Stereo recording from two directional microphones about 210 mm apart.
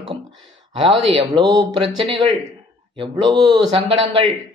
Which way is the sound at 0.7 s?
25° right (ahead or behind).